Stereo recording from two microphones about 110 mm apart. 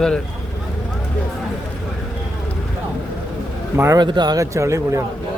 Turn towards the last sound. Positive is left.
turn(degrees=-25)  # may be behind; listen again after turning